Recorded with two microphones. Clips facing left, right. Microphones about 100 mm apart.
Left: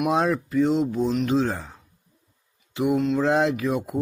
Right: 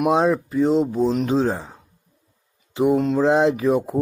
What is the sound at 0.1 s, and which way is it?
Speech, 25° right (ahead or behind).